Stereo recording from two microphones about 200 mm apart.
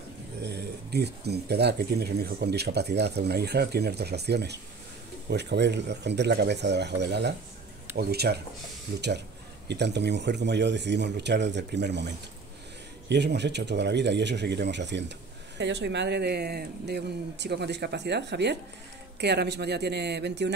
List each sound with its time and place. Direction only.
0.4 s speech: 55° right (ahead or behind)
13.1 s speech: 55° right (ahead or behind)